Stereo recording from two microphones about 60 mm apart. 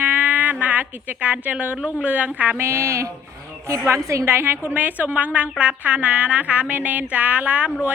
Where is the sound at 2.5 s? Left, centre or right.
Right.